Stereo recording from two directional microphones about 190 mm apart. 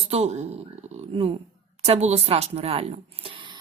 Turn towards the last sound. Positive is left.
turn(degrees=-30)  # may be behind; listen again after turning